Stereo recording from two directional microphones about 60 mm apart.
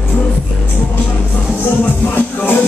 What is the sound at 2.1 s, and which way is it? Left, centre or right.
Music, left.